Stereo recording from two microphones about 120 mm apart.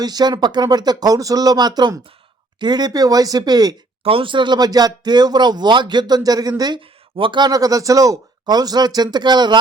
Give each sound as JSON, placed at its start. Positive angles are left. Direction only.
{"t": 0.0, "sound": "speech", "side_deg": -35}
{"t": 4.0, "sound": "speech", "side_deg": -50}